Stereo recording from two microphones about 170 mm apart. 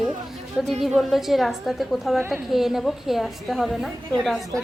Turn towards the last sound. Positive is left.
turn(degrees=0)  # may be behind; listen again after turning